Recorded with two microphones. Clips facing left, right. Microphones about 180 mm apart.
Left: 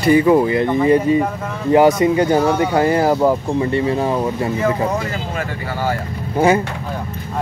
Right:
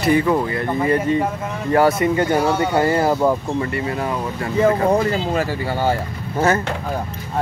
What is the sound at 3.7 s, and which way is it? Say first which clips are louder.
Speech: left 5 dB; 25° left (ahead or behind).